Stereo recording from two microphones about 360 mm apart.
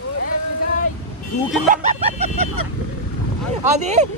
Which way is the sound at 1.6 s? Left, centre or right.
Centre.